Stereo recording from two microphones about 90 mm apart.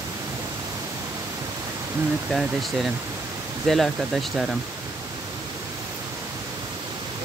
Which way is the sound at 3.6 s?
Centre (ahead or behind).